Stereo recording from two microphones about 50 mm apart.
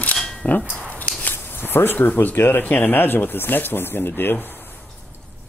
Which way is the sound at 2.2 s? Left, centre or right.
Left.